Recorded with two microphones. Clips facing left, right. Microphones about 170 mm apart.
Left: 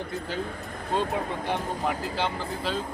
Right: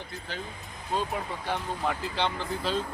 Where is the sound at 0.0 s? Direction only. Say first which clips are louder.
Left 7 dB; 55° left (ahead or behind).